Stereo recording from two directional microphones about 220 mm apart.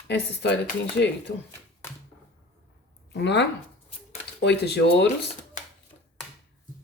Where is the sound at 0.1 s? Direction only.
50° left (ahead or behind).